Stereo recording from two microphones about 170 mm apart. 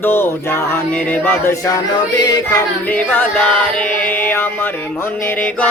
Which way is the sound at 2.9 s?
10° left (ahead or behind).